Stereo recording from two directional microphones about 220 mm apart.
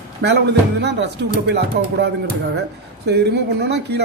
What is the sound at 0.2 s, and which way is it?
Speech, 55° right (ahead or behind).